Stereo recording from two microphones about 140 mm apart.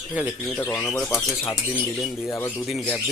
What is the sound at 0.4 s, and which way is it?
Speech, 10° left (ahead or behind).